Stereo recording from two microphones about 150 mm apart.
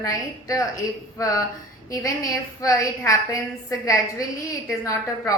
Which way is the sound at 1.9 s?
25° left (ahead or behind).